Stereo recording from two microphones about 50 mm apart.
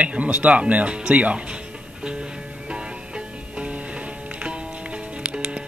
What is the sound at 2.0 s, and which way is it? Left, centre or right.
Music, centre.